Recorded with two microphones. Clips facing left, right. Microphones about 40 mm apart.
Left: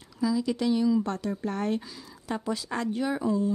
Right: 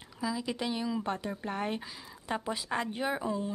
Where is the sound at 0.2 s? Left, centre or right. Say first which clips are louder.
Left 7 dB; right.